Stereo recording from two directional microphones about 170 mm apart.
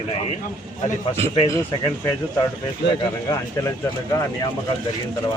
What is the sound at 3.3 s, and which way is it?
Speech, 20° left (ahead or behind).